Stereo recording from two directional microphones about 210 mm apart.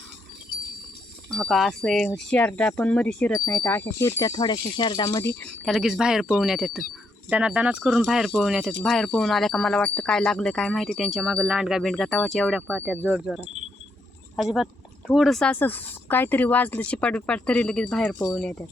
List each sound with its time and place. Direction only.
1.4 s speech: centre (ahead or behind); by 5.2 s 20° left (ahead or behind)
5.4 s speech: centre (ahead or behind)